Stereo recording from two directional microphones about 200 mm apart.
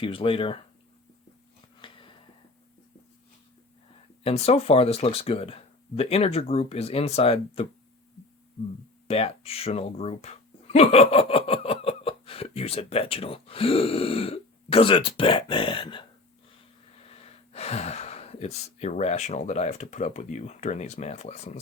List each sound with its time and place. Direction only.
0.0 s speech: 25° left (ahead or behind)
1.8 s a sound: 25° left (ahead or behind)
4.2 s speech: 30° left (ahead or behind)
9.0 s speech: 30° left (ahead or behind)